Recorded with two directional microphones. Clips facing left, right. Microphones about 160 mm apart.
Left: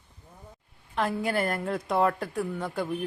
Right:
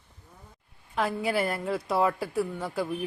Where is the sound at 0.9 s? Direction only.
Centre (ahead or behind).